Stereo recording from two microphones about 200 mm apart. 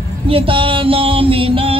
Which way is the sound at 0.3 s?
25° right (ahead or behind).